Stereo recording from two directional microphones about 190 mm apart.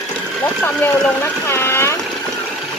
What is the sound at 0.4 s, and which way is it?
A woman's voice, 10° left (ahead or behind).